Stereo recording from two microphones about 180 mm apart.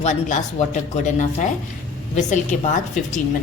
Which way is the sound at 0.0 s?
40° left (ahead or behind).